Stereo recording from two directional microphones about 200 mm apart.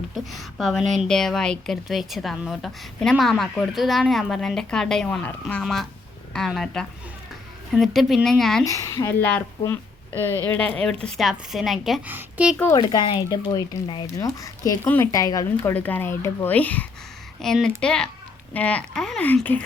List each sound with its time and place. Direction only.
0.3 s a woman's voice: centre (ahead or behind)
8.6 s a woman's voice: 15° left (ahead or behind); by 12.5 s 5° right (ahead or behind)
12.7 s a woman's voice: 20° left (ahead or behind)